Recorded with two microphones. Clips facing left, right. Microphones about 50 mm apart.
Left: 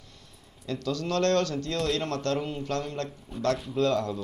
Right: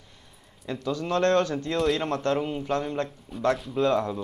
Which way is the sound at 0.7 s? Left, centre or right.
Right.